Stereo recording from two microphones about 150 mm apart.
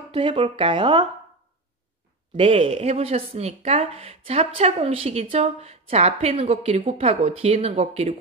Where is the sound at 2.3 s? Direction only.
35° right (ahead or behind).